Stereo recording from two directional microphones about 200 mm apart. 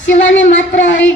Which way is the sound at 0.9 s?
70° left (ahead or behind).